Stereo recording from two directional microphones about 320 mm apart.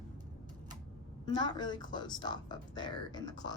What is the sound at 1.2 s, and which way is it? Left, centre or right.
A woman's voice, centre.